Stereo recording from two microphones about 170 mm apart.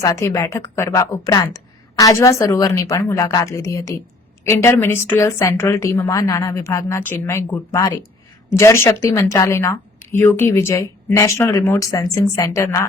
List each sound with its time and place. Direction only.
0.0 s a woman's voice: 20° left (ahead or behind)